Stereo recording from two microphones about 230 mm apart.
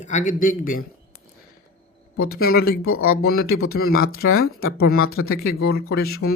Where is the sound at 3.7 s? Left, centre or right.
Left.